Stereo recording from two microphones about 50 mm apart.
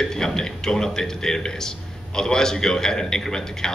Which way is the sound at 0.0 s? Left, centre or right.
Centre.